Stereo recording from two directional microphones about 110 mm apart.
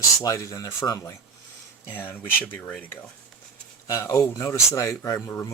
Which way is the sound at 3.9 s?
30° left (ahead or behind).